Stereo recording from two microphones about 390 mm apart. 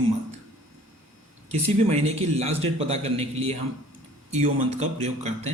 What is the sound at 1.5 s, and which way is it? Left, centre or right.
Speech, centre.